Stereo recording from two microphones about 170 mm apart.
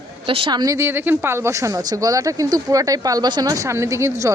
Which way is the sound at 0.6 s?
15° right (ahead or behind).